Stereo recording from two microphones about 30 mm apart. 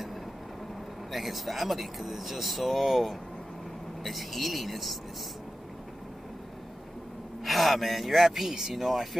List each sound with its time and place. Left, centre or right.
1.1 s speech: centre
7.4 s speech: centre